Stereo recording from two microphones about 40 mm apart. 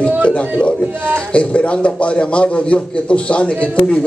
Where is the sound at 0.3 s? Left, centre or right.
Left.